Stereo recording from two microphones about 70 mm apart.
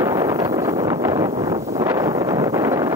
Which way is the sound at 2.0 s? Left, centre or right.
Right.